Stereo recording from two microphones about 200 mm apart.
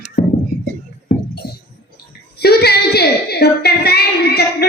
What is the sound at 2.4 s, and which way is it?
Female singing, 55° left (ahead or behind).